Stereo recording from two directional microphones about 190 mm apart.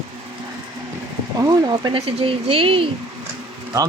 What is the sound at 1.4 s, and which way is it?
Speech, 20° right (ahead or behind).